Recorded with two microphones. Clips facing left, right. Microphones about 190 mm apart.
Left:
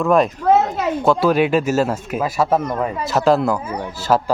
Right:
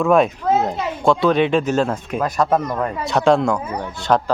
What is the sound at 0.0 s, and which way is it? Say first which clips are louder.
Speech: even; centre (ahead or behind).